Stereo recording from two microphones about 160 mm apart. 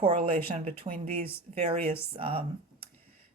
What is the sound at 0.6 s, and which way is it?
Speech, 45° right (ahead or behind).